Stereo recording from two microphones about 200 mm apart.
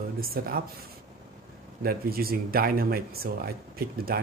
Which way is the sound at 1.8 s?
50° right (ahead or behind).